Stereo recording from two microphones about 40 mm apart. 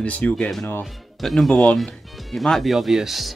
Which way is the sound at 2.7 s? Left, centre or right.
Centre.